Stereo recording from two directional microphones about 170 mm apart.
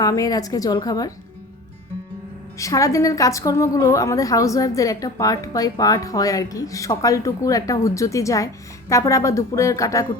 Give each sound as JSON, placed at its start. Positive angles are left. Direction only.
{"t": 0.0, "sound": "a woman's voice", "side_deg": 20}
{"t": 2.6, "sound": "a woman's voice", "side_deg": 20}